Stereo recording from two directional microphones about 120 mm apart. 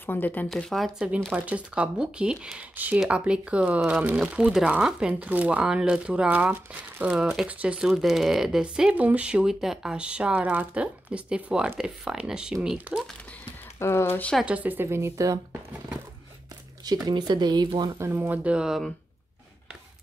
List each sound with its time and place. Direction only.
0.0 s speech: 15° left (ahead or behind)
0.5 s speech: centre (ahead or behind)
13.7 s speech: 20° left (ahead or behind)
14.4 s a woman's voice: 10° right (ahead or behind)
16.8 s speech: 35° right (ahead or behind)
17.9 s speech: 20° right (ahead or behind); by 18.9 s 5° right (ahead or behind)